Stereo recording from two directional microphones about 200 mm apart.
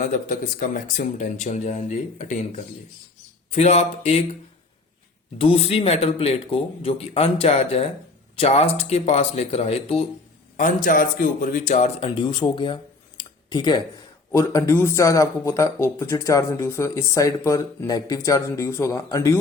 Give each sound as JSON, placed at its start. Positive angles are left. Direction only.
{"t": 0.0, "sound": "speech", "side_deg": 40}
{"t": 3.5, "sound": "speech", "side_deg": 35}
{"t": 5.4, "sound": "speech", "side_deg": 30}
{"t": 10.6, "sound": "speech", "side_deg": 40}